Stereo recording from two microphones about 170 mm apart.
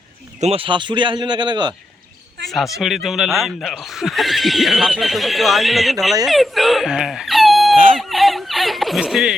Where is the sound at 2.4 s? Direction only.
Centre (ahead or behind).